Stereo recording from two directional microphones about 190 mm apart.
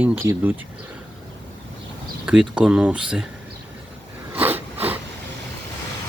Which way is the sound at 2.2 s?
5° right (ahead or behind).